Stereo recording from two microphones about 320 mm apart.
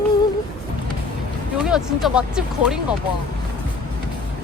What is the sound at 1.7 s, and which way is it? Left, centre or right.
Speech, centre.